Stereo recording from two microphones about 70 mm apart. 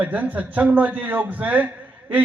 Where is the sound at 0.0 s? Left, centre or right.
Right.